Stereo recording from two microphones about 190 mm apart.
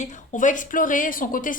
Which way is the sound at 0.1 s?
40° left (ahead or behind).